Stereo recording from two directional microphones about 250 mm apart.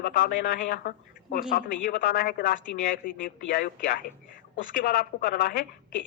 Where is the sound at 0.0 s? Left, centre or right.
Left.